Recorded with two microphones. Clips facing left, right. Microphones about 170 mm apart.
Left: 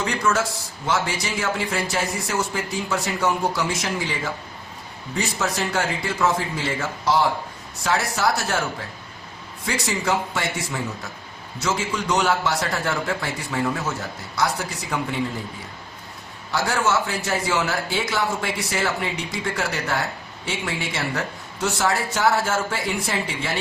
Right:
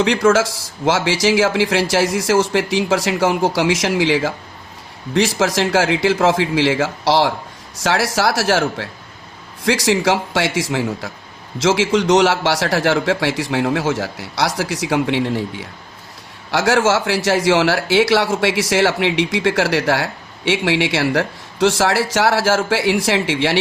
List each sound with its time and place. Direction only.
0.0 s a man's voice: 85° right
9.6 s a man's voice: 90° right